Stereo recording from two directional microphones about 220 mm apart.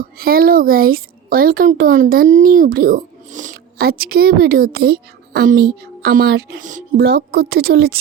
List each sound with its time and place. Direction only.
0.0 s speech: 40° right (ahead or behind)
6.9 s a woman's voice: 45° right (ahead or behind)